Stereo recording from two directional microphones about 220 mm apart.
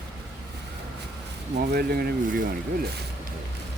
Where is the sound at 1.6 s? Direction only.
45° right (ahead or behind).